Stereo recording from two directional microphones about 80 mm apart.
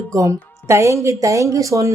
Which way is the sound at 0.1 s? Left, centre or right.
Right.